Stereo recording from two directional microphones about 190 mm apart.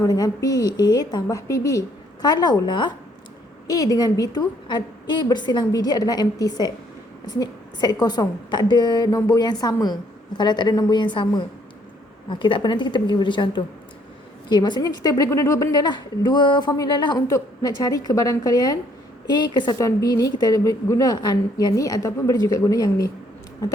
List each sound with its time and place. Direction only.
0.0 s a woman's voice: 20° left (ahead or behind)